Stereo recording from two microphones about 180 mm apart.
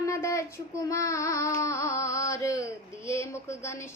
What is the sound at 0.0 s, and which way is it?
A woman's voice, 15° left (ahead or behind).